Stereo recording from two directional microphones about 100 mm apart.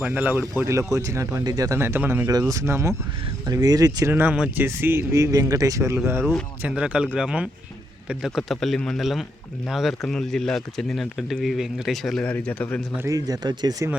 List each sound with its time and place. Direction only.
0.0 s speech: 15° right (ahead or behind)
0.6 s speech: 30° right (ahead or behind)
2.3 s speech: 35° right (ahead or behind)
3.4 s speech: 40° right (ahead or behind)
4.1 s speech: 20° right (ahead or behind)
6.6 s speech: 10° right (ahead or behind)
12.2 s a man's voice: 15° left (ahead or behind)
13.1 s speech: 40° right (ahead or behind)